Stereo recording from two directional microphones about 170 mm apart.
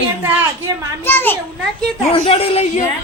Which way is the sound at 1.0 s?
10° left (ahead or behind).